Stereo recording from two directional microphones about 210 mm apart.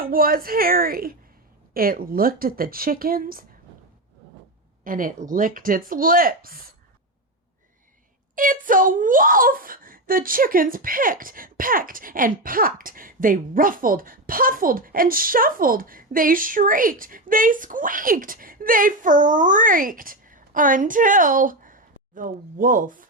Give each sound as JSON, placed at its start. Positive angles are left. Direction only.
{"t": 0.0, "sound": "speech", "side_deg": -45}
{"t": 4.8, "sound": "speech", "side_deg": -40}
{"t": 8.4, "sound": "speech", "side_deg": -40}